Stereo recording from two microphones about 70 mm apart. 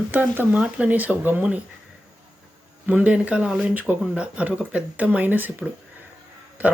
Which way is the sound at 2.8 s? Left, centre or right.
Right.